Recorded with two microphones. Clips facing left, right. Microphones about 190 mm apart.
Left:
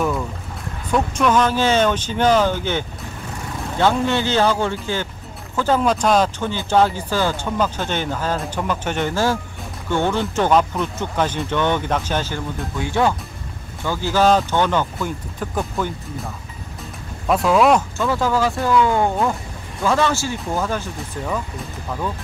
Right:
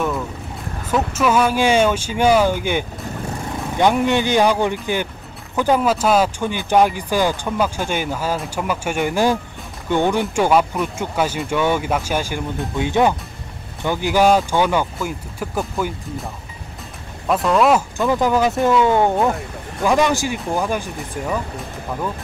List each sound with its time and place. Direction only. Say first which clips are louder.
0.9 s speech: even; 5° right (ahead or behind)
17.3 s speech: even; centre (ahead or behind)
17.9 s speech: right 2 dB; 15° right (ahead or behind)